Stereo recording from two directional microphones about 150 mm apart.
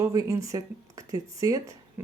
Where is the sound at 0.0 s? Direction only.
20° right (ahead or behind).